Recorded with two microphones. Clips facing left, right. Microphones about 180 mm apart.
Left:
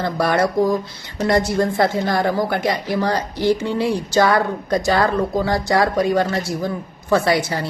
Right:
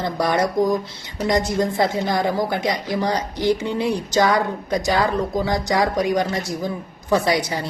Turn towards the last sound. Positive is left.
turn(degrees=-20)  # may be behind; listen again after turning